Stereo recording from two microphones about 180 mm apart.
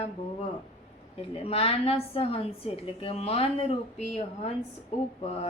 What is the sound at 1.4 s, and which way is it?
A woman's voice, 30° left (ahead or behind).